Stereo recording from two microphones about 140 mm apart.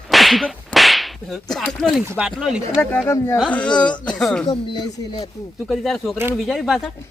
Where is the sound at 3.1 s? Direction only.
25° left (ahead or behind).